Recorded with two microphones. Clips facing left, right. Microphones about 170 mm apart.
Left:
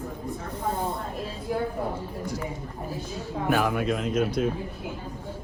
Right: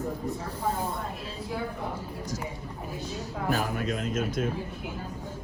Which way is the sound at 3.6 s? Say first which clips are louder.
Left 5 dB; 60° left (ahead or behind).